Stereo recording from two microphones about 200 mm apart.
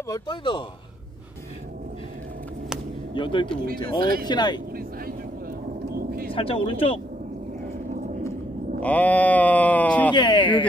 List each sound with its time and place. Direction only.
0.1 s speech: 25° left (ahead or behind)
3.2 s speech: 25° left (ahead or behind)
4.0 s speech: 50° right (ahead or behind)
4.3 s speech: 20° left (ahead or behind)
5.9 s a sound: 50° right (ahead or behind)
6.3 s speech: 25° left (ahead or behind)
8.7 s speech: 5° left (ahead or behind)
10.1 s speech: 25° left (ahead or behind)